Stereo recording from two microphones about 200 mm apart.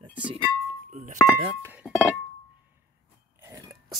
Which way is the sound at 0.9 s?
40° right (ahead or behind).